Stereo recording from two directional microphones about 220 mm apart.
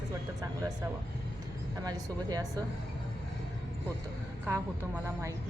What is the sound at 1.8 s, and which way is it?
Speech, 15° right (ahead or behind).